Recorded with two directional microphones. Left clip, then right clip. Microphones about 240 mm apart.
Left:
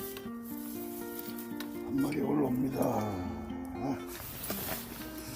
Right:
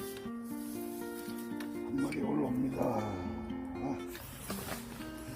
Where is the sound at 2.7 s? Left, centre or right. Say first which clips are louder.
Left 2 dB; left.